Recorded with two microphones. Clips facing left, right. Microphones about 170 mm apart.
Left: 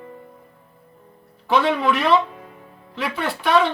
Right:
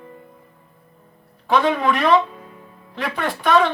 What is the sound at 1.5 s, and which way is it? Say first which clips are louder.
Speech: right 1 dB; 45° right (ahead or behind).